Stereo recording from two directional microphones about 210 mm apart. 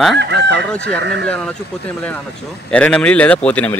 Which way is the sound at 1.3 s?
5° left (ahead or behind).